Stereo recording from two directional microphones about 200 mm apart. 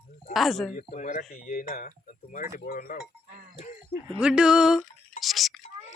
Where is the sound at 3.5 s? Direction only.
40° left (ahead or behind).